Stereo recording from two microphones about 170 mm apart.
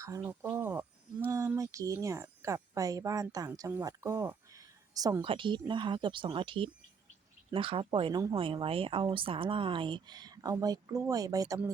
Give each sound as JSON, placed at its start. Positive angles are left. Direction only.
{"t": 0.0, "sound": "a woman's voice", "side_deg": -15}